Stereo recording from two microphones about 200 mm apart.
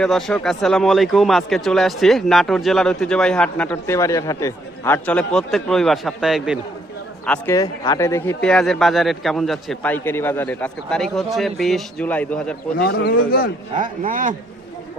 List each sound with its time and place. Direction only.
0.0 s speech: centre (ahead or behind)
7.3 s a man's voice: 15° left (ahead or behind)
8.4 s speech: 5° left (ahead or behind)
12.8 s speech: 50° left (ahead or behind)
13.7 s speech: 40° right (ahead or behind)